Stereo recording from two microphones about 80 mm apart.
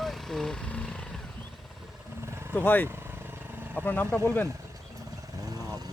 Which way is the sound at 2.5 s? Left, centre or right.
Left.